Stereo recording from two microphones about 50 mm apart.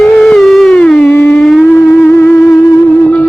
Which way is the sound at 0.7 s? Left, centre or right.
Centre.